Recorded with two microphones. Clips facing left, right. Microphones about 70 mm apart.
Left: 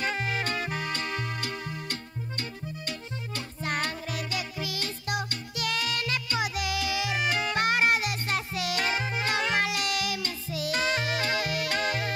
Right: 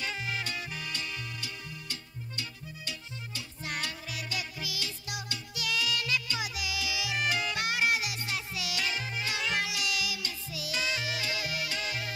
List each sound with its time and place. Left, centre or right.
0.0 s music: left